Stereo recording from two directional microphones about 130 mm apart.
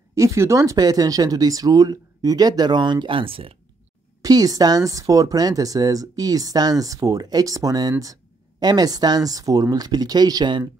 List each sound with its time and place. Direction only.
0.1 s speech: 25° right (ahead or behind); by 3.5 s 45° right (ahead or behind)
4.2 s speech: 30° right (ahead or behind)